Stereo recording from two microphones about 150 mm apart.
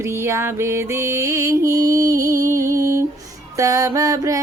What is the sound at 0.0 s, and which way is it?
Music, 20° right (ahead or behind).